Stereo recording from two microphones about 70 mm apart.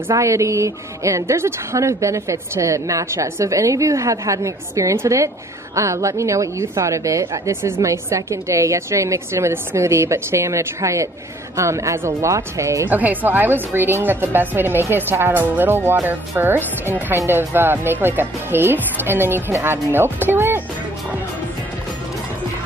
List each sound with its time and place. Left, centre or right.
0.2 s a woman's voice: right
12.8 s a woman's voice: right